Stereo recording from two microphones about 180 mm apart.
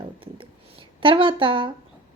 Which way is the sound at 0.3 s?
30° right (ahead or behind).